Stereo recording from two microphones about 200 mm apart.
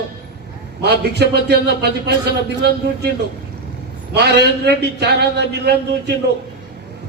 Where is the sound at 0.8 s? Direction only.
55° right (ahead or behind).